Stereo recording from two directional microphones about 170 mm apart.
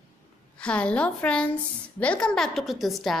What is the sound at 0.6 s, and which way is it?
A woman's voice, 5° left (ahead or behind).